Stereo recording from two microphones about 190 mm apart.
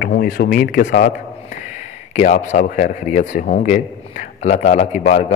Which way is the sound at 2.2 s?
40° left (ahead or behind).